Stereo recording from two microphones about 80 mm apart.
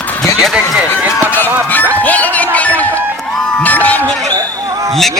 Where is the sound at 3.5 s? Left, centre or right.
Centre.